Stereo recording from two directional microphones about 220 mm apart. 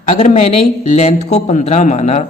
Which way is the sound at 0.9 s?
30° left (ahead or behind).